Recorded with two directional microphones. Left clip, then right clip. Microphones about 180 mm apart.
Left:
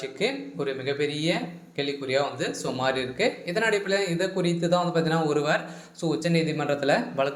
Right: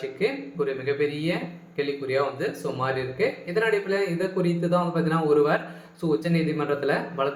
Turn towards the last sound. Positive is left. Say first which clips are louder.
# left 1 dB
turn(degrees=25)  # may be behind; listen again after turning